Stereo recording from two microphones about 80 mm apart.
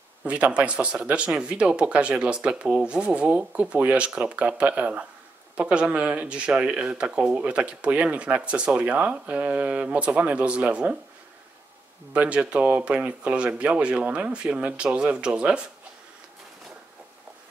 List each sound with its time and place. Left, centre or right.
0.2 s speech: centre
12.1 s speech: centre